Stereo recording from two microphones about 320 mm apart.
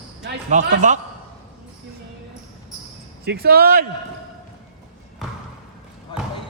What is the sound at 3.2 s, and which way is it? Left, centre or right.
Speech, right.